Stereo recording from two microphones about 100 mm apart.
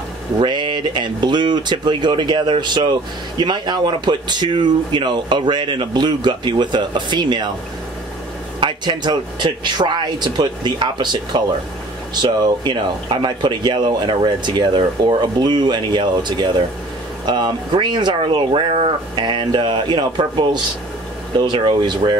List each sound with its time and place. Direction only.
0.4 s speech: 50° right (ahead or behind)
8.5 s speech: 50° right (ahead or behind)